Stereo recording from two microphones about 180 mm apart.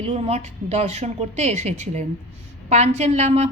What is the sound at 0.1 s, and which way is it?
A woman's voice, 35° right (ahead or behind).